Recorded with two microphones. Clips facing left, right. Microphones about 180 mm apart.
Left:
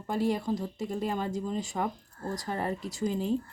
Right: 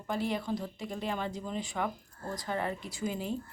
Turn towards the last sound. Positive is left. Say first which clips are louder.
# left 5 dB
turn(degrees=40)  # may be behind; listen again after turning